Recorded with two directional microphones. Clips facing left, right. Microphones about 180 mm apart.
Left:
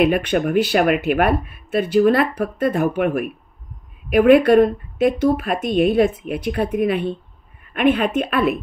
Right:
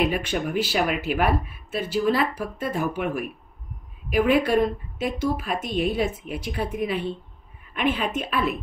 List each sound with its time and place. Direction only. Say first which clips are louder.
0.0 s speech: left 7 dB; 60° left (ahead or behind)